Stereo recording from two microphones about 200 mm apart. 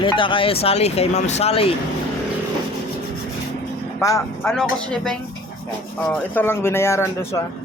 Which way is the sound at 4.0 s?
15° left (ahead or behind).